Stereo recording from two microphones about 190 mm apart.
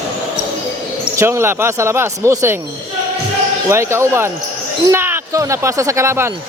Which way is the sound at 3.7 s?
15° right (ahead or behind).